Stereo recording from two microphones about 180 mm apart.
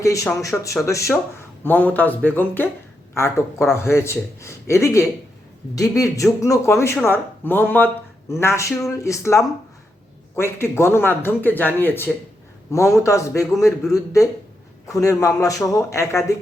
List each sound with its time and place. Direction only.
0.0 s speech: 15° left (ahead or behind)